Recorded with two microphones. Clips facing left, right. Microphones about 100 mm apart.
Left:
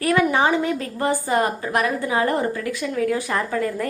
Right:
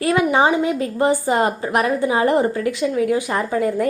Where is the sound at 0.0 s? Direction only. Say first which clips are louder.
Right 2 dB; 20° right (ahead or behind).